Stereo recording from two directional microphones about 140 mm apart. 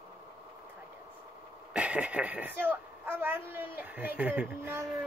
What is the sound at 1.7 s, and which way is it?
A woman's voice, 10° right (ahead or behind).